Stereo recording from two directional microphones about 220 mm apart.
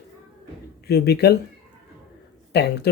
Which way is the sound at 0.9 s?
45° left (ahead or behind).